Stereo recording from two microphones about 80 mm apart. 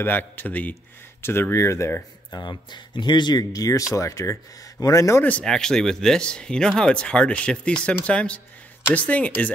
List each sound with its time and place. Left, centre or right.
0.0 s speech: left
2.3 s speech: left
5.4 s speech: centre